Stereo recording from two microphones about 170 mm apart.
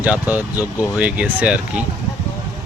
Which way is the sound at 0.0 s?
10° right (ahead or behind).